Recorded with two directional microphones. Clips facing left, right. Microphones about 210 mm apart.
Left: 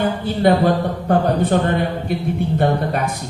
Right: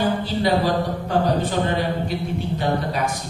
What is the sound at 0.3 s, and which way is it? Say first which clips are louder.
A man's voice: left 5 dB; 55° left (ahead or behind).